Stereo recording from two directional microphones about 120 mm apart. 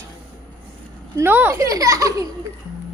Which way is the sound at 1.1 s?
20° right (ahead or behind).